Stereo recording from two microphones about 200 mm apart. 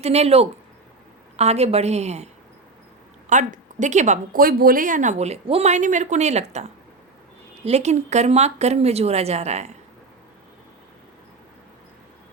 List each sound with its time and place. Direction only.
0.0 s speech: 30° right (ahead or behind)